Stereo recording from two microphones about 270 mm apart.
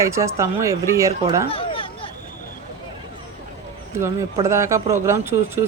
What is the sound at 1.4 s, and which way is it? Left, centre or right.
Chatter, centre.